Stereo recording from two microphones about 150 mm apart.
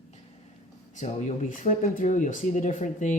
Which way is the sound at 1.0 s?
55° left (ahead or behind).